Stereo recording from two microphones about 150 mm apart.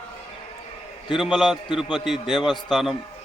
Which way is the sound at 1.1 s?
5° right (ahead or behind).